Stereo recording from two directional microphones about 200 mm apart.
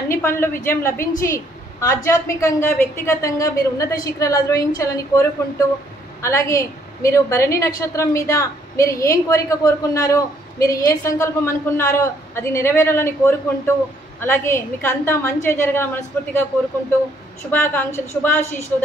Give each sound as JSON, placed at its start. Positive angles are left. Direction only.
{"t": 0.1, "sound": "a woman's voice", "side_deg": 10}
{"t": 17.5, "sound": "a woman's voice", "side_deg": 10}